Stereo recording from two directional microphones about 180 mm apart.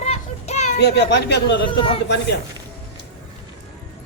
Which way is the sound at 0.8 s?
70° left (ahead or behind).